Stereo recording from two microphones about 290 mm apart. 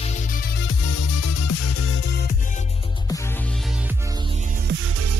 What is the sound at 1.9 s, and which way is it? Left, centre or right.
Music, left.